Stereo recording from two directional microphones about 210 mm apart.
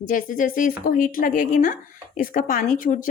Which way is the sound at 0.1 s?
40° left (ahead or behind).